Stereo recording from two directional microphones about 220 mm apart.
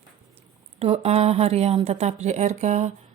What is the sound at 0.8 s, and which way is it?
Speech, 25° right (ahead or behind).